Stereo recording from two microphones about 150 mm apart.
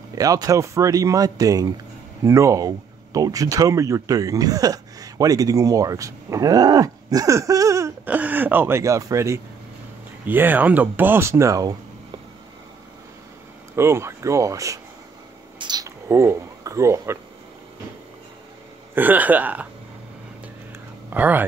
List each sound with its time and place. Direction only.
0.1 s speech: 25° right (ahead or behind)
13.7 s speech: 15° right (ahead or behind)
15.6 s a sound: 25° right (ahead or behind)
18.9 s speech: 10° right (ahead or behind)
21.1 s speech: 10° right (ahead or behind)